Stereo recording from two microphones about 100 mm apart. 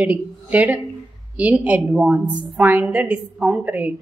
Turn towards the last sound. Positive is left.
turn(degrees=-15)  # may be behind; listen again after turning